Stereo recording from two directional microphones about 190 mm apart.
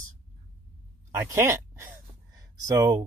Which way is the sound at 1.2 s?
15° right (ahead or behind).